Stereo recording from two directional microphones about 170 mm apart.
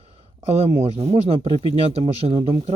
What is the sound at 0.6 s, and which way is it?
Speech, 35° right (ahead or behind).